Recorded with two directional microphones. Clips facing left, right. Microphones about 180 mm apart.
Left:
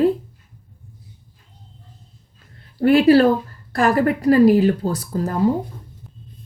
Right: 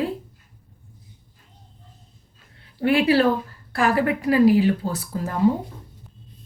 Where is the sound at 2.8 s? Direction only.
40° left (ahead or behind).